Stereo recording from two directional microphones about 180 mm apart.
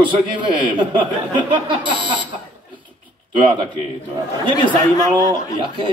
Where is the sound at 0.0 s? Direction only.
25° right (ahead or behind).